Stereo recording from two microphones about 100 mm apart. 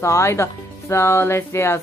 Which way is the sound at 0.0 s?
30° left (ahead or behind).